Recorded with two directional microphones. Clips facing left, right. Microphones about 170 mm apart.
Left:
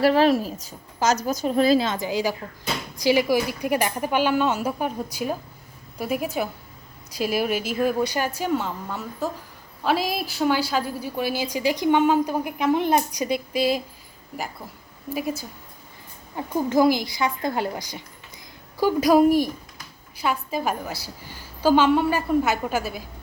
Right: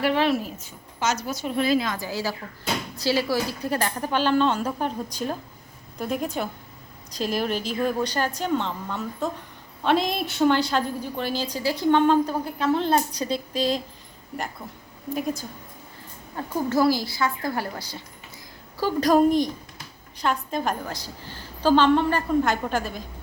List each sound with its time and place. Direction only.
0.0 s a woman's voice: 40° left (ahead or behind); by 13.8 s 10° left (ahead or behind)
15.1 s a woman's voice: 5° left (ahead or behind)